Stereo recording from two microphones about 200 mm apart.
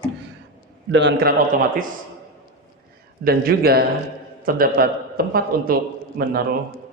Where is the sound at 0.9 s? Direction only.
60° right (ahead or behind).